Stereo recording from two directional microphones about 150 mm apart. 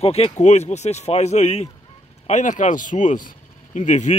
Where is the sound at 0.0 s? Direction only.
40° left (ahead or behind).